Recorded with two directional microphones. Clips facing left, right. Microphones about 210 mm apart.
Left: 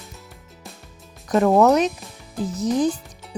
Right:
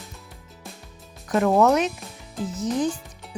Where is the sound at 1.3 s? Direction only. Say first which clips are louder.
Left 3 dB; 35° left (ahead or behind).